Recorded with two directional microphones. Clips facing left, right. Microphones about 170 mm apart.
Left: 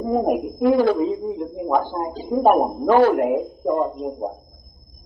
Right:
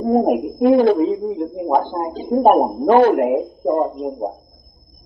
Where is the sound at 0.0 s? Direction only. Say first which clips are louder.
Right 5 dB; 50° right (ahead or behind).